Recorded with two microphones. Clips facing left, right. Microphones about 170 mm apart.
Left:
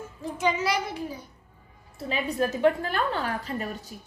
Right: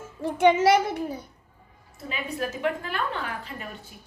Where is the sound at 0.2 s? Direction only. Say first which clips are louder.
Right 7 dB; 65° right (ahead or behind).